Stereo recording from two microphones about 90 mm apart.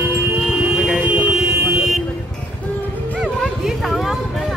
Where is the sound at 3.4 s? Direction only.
Centre (ahead or behind).